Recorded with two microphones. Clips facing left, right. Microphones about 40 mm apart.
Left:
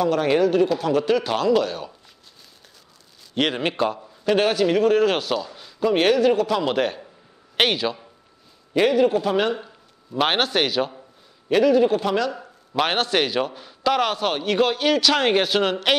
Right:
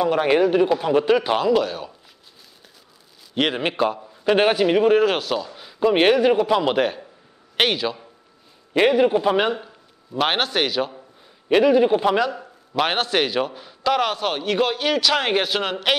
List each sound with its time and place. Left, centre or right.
0.0 s a man's voice: centre
1.5 s a man's voice: centre
3.3 s a man's voice: centre
5.7 s a man's voice: right
6.8 s a man's voice: centre
8.7 s a man's voice: centre
9.6 s speech: centre
11.4 s a man's voice: centre
12.3 s a man's voice: centre